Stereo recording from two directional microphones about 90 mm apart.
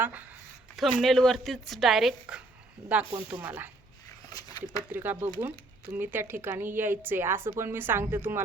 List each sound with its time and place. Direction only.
0.0 s speech: 20° right (ahead or behind)
0.8 s a woman's voice: centre (ahead or behind)
3.4 s speech: 20° right (ahead or behind)
4.3 s a sound: 45° left (ahead or behind)
4.9 s speech: 25° right (ahead or behind)